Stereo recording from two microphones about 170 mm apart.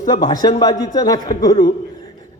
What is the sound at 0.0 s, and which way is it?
A man's voice, 25° left (ahead or behind).